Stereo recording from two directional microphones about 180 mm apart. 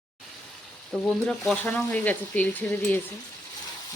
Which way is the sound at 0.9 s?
5° left (ahead or behind).